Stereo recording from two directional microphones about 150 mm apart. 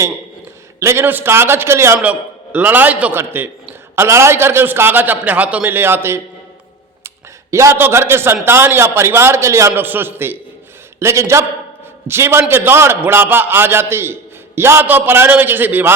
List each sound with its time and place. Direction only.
0.8 s a man's voice: 15° right (ahead or behind)
7.5 s a man's voice: 20° right (ahead or behind)